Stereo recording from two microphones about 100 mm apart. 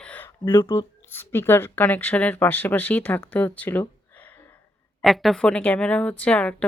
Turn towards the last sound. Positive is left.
turn(degrees=10)  # may be behind; listen again after turning